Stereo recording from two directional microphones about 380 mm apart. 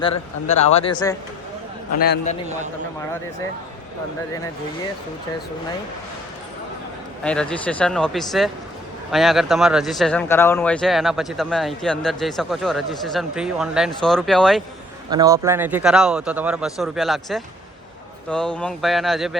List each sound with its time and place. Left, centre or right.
0.4 s speech: centre
2.0 s a man's voice: left
7.3 s speech: centre